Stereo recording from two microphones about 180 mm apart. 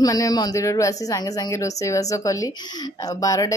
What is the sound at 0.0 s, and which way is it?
Speech, 20° left (ahead or behind).